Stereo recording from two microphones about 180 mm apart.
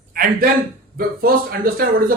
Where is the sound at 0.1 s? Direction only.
50° right (ahead or behind).